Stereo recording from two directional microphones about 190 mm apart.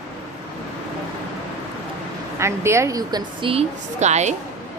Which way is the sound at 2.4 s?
15° right (ahead or behind).